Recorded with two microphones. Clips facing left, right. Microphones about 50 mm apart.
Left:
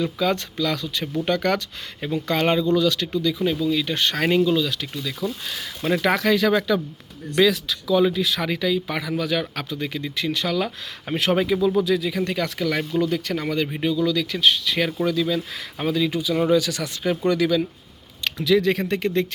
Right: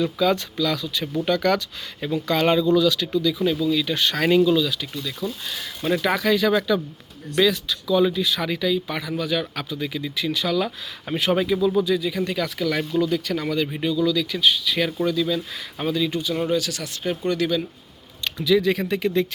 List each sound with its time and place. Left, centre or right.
0.0 s speech: left
4.7 s speech: left
5.5 s speech: left
6.5 s speech: left
7.4 s speech: left
8.0 s speech: left
11.9 s speech: left
13.8 s speech: left
17.0 s speech: left
18.3 s speech: left